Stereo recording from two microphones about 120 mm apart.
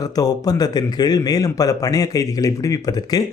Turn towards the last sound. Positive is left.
turn(degrees=30)  # may be behind; listen again after turning